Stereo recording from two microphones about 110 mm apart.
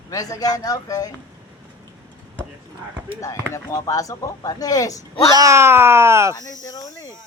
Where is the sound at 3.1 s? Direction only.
25° left (ahead or behind).